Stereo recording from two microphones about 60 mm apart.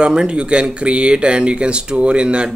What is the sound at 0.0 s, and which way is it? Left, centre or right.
Speech, centre.